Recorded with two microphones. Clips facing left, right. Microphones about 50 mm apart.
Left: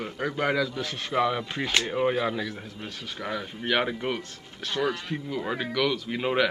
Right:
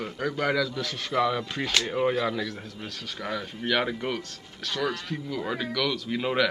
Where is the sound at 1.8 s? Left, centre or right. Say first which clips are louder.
Even; centre.